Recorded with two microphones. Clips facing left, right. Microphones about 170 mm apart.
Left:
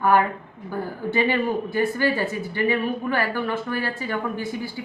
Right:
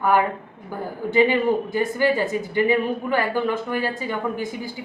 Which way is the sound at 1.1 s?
20° right (ahead or behind).